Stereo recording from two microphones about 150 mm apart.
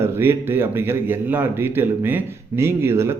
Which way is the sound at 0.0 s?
15° right (ahead or behind).